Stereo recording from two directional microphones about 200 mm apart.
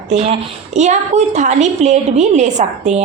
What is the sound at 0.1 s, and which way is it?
A woman's voice, 35° right (ahead or behind).